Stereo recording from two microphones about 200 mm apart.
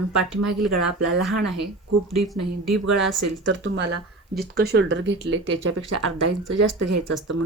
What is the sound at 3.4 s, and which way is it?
Speech, 65° right (ahead or behind).